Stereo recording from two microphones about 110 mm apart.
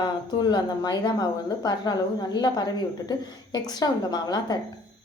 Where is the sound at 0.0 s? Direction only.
40° left (ahead or behind).